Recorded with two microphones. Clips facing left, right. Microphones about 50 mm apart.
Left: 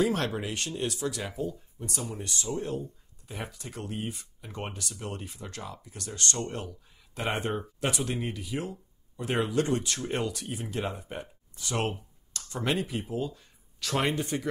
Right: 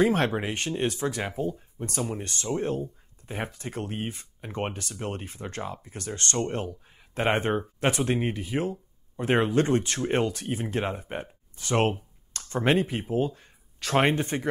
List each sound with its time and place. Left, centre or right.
0.0 s speech: right